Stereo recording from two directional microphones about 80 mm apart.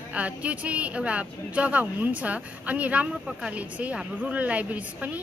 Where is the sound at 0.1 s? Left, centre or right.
Centre.